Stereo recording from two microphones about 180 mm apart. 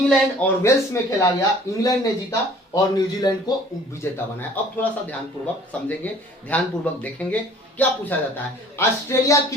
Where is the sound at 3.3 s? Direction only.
20° left (ahead or behind).